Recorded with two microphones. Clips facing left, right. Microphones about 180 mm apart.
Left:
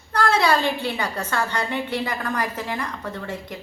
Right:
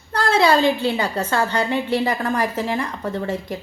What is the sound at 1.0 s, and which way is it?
A woman's voice, 30° right (ahead or behind).